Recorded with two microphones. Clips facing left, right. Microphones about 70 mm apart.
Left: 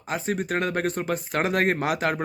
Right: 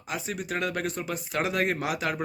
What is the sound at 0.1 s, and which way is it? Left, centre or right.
Speech, left.